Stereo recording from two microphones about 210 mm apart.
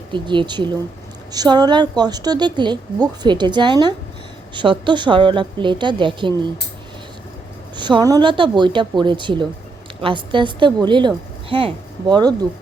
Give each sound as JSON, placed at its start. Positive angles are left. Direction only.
{"t": 0.1, "sound": "speech", "side_deg": -20}
{"t": 7.8, "sound": "speech", "side_deg": -20}